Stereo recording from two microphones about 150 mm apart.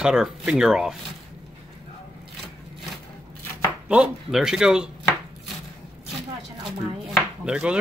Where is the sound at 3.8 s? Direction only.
5° right (ahead or behind).